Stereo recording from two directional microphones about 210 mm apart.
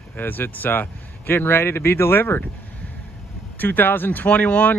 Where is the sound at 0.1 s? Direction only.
10° left (ahead or behind).